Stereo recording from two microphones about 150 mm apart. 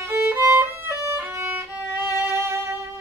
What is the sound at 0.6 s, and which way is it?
Violin, 15° right (ahead or behind).